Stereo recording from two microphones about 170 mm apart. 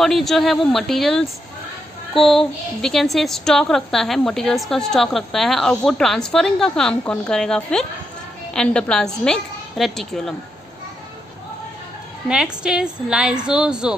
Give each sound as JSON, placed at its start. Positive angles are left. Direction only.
{"t": 0.0, "sound": "a woman's voice", "side_deg": 0}
{"t": 12.3, "sound": "a woman's voice", "side_deg": -5}